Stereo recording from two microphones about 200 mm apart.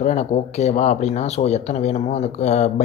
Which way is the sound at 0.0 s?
35° left (ahead or behind).